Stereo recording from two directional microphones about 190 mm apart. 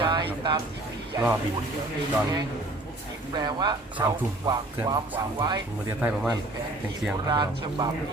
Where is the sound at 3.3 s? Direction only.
20° right (ahead or behind).